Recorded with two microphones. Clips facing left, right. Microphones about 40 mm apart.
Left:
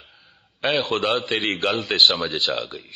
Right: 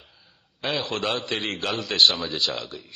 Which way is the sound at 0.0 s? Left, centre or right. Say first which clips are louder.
Left 4 dB; left.